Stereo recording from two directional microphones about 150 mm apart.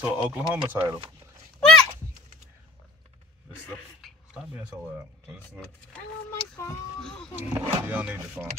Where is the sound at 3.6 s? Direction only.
10° left (ahead or behind).